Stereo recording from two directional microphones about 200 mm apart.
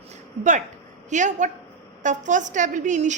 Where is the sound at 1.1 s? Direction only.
40° right (ahead or behind).